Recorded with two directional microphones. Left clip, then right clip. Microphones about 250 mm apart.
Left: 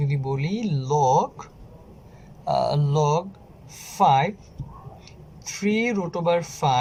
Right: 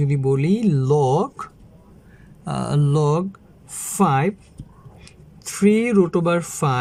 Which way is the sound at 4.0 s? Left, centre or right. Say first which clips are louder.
Left 1 dB; right.